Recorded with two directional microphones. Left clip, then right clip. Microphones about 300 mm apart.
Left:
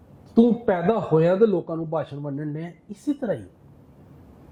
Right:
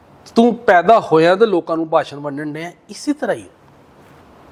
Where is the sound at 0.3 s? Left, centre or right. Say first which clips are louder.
Right 9 dB; centre.